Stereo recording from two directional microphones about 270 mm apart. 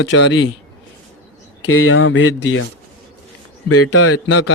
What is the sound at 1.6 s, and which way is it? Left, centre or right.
A man's voice, left.